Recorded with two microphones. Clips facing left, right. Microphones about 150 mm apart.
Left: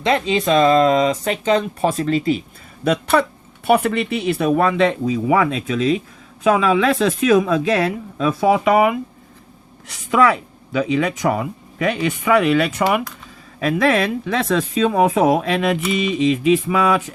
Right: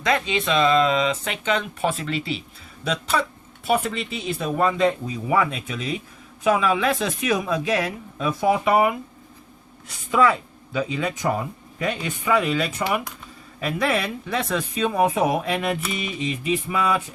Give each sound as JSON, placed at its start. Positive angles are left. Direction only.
{"t": 0.0, "sound": "speech", "side_deg": 30}
{"t": 2.8, "sound": "speech", "side_deg": 55}
{"t": 9.8, "sound": "speech", "side_deg": 70}
{"t": 13.6, "sound": "speech", "side_deg": 90}